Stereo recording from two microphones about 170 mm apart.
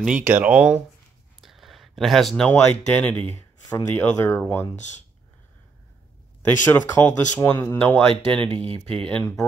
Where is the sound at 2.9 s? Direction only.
10° left (ahead or behind).